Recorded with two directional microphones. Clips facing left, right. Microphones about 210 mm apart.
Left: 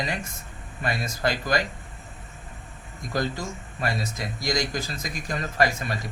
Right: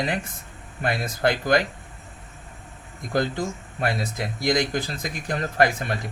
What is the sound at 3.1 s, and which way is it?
Speech, 55° right (ahead or behind).